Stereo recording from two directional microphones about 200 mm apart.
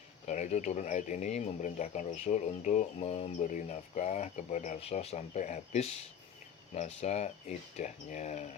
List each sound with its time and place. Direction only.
0.3 s speech: 35° left (ahead or behind)